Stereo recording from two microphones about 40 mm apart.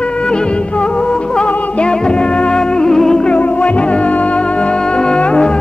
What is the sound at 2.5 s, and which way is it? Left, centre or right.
Music, centre.